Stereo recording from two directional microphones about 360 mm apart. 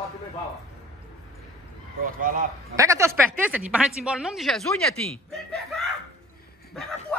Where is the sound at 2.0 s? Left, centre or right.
Right.